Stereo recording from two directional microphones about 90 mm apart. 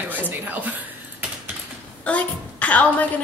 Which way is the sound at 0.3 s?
20° right (ahead or behind).